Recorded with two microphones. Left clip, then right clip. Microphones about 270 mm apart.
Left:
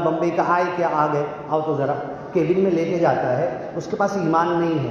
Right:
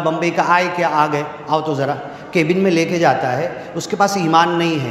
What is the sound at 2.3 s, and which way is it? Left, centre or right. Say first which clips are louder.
Speech: right 4 dB; right.